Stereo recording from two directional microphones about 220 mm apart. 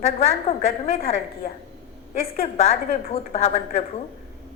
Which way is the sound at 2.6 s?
30° left (ahead or behind).